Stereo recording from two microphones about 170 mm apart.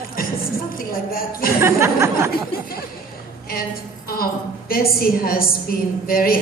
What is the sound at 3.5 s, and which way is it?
A woman's voice, 60° left (ahead or behind).